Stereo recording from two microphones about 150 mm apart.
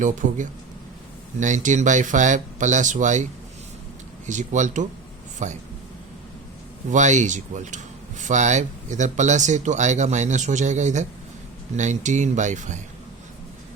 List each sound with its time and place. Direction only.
0.0 s speech: 60° right (ahead or behind)
4.3 s speech: 55° right (ahead or behind)
6.9 s speech: 55° right (ahead or behind)